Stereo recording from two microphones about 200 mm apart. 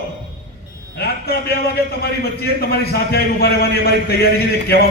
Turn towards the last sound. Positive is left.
turn(degrees=50)  # may be behind; listen again after turning